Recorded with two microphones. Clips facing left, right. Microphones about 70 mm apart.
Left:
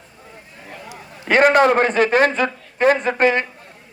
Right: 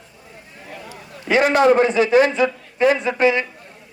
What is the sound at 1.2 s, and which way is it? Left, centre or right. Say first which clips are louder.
A man's voice: left 2 dB; left.